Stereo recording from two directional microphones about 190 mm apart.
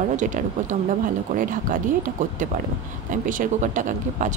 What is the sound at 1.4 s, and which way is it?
Speech, 45° right (ahead or behind).